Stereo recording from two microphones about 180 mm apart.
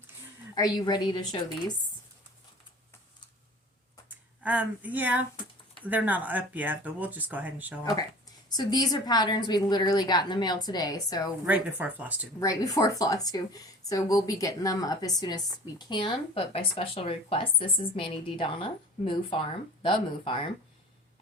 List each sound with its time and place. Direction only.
0.5 s speech: 25° left (ahead or behind)
4.1 s speech: 10° right (ahead or behind)
8.4 s speech: 20° left (ahead or behind)
11.4 s speech: 10° right (ahead or behind)
12.4 s speech: 20° left (ahead or behind)